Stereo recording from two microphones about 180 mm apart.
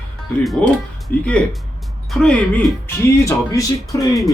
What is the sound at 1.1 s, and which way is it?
Speech, 10° left (ahead or behind).